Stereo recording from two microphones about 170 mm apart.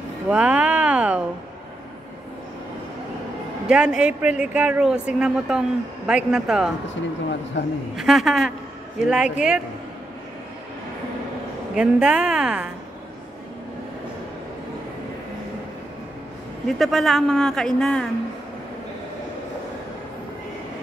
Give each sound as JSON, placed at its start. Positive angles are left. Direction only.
{"t": 0.3, "sound": "speech", "side_deg": -5}
{"t": 3.6, "sound": "speech", "side_deg": -5}
{"t": 7.6, "sound": "a man's voice", "side_deg": 90}
{"t": 7.9, "sound": "speech", "side_deg": 0}
{"t": 11.7, "sound": "speech", "side_deg": -5}
{"t": 16.6, "sound": "speech", "side_deg": 0}